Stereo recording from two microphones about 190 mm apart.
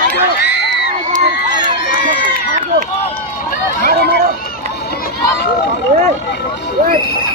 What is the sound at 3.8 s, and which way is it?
Speech, 55° right (ahead or behind).